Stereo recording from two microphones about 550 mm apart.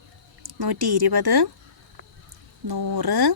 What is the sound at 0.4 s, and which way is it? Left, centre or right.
Speech, right.